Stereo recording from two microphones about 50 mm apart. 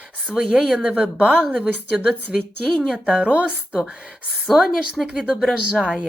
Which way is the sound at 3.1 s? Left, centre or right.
Right.